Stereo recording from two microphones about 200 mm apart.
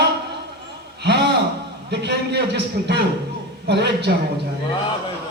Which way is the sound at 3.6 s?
55° right (ahead or behind).